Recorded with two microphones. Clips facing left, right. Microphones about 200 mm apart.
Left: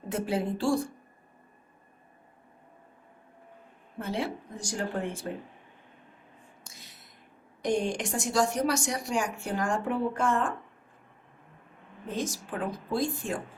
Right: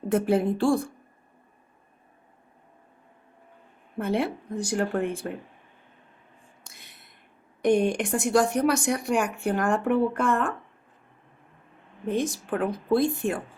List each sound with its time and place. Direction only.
0.1 s a woman's voice: 55° right (ahead or behind)
3.9 s a woman's voice: 55° right (ahead or behind)
6.7 s a sound: 60° right (ahead or behind)
7.6 s a woman's voice: 60° right (ahead or behind)
12.0 s a woman's voice: 60° right (ahead or behind)